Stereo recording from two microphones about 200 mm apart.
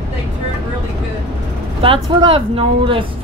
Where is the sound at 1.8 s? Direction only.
25° right (ahead or behind).